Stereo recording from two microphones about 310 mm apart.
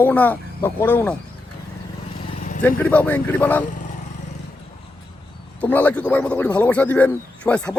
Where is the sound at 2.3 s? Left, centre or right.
Left.